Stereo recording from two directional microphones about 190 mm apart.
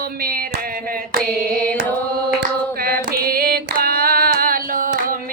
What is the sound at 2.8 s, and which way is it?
Female singing, 50° right (ahead or behind).